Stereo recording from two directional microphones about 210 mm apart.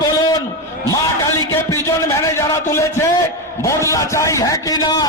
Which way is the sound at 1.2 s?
15° left (ahead or behind).